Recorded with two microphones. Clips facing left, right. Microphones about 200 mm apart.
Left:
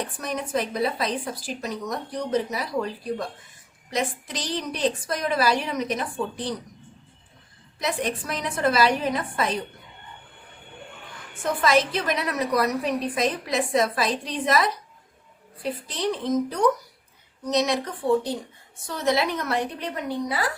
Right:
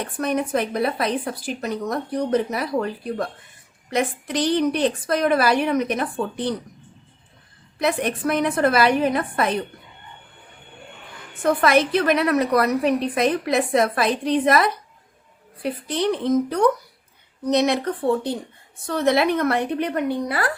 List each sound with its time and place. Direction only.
0.2 s a woman's voice: 60° right (ahead or behind)
7.8 s a woman's voice: 60° right (ahead or behind)
11.4 s a woman's voice: 60° right (ahead or behind)
15.9 s a woman's voice: 60° right (ahead or behind)